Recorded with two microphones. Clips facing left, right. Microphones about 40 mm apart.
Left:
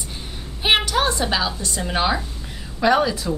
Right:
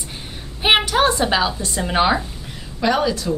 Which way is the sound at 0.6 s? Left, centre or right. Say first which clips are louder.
Right 3 dB; centre.